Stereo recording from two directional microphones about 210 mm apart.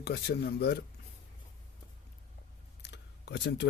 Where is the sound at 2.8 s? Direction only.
55° left (ahead or behind).